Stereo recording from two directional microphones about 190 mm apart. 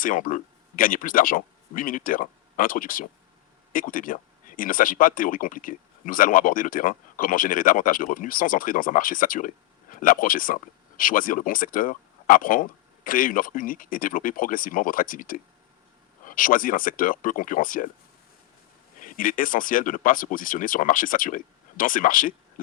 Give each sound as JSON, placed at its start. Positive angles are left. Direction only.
{"t": 0.0, "sound": "speech", "side_deg": 45}
{"t": 18.9, "sound": "speech", "side_deg": 45}